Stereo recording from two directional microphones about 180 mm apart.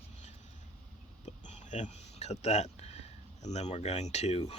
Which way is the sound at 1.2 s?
40° left (ahead or behind).